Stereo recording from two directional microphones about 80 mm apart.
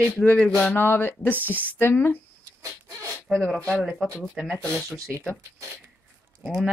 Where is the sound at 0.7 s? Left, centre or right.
Left.